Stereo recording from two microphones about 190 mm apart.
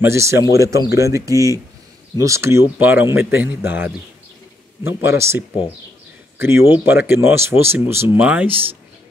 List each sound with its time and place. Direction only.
0.0 s speech: 15° right (ahead or behind)
1.3 s speech: 15° left (ahead or behind)
2.2 s speech: 15° right (ahead or behind)